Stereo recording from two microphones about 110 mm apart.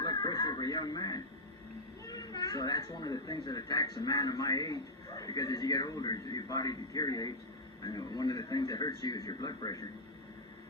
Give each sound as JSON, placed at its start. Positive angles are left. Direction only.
{"t": 0.0, "sound": "music", "side_deg": 40}
{"t": 2.0, "sound": "speech", "side_deg": 35}